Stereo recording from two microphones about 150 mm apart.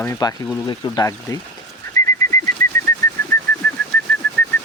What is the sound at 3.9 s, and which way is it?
Bird, 15° left (ahead or behind).